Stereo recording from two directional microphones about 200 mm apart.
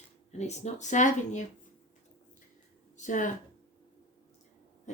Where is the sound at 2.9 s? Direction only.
40° left (ahead or behind).